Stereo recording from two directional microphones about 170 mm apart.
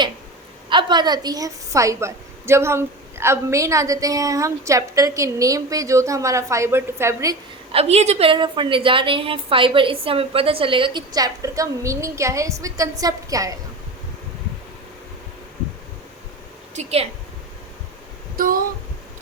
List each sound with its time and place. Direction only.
0.7 s a woman's voice: 25° right (ahead or behind)
7.7 s a woman's voice: 35° right (ahead or behind); by 13.5 s 20° right (ahead or behind)
16.7 s a woman's voice: 35° right (ahead or behind)
18.3 s speech: 55° right (ahead or behind)